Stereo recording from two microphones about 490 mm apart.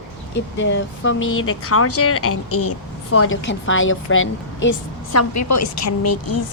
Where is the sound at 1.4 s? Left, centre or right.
Left.